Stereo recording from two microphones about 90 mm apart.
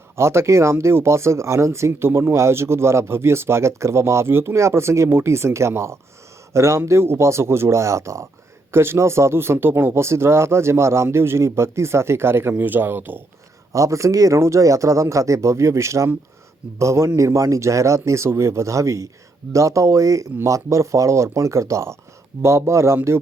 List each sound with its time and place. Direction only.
0.2 s speech: 30° right (ahead or behind)
13.7 s speech: 35° right (ahead or behind)